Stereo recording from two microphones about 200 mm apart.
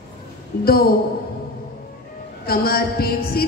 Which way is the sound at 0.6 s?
50° left (ahead or behind).